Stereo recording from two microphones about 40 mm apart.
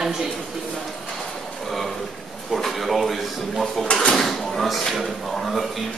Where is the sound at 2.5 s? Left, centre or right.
Centre.